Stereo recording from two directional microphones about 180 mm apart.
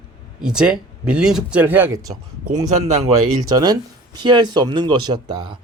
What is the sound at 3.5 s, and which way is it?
A man's voice, 20° right (ahead or behind).